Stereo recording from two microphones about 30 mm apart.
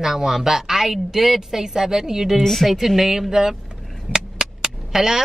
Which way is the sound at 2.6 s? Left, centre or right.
Centre.